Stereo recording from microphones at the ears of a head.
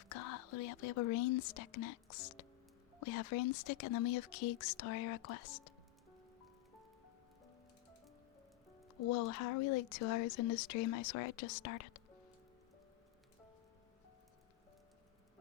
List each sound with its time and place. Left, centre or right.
0.0 s speech: left
9.0 s speech: left